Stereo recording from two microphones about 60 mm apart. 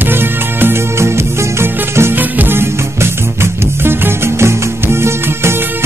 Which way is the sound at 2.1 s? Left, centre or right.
Right.